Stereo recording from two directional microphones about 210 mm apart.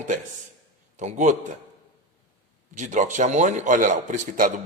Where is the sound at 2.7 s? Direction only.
35° right (ahead or behind).